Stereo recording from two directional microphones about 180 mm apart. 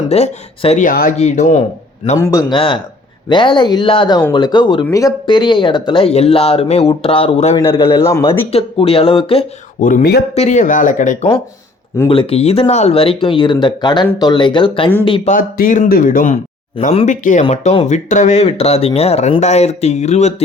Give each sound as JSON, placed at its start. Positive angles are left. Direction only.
{"t": 0.1, "sound": "speech", "side_deg": 35}
{"t": 0.9, "sound": "speech", "side_deg": 55}
{"t": 1.1, "sound": "speech", "side_deg": 40}
{"t": 2.1, "sound": "a man's voice", "side_deg": 15}
{"t": 2.6, "sound": "speech", "side_deg": 30}
{"t": 9.8, "sound": "speech", "side_deg": 50}
{"t": 10.3, "sound": "speech", "side_deg": 40}
{"t": 12.0, "sound": "speech", "side_deg": 30}
{"t": 15.3, "sound": "speech", "side_deg": 50}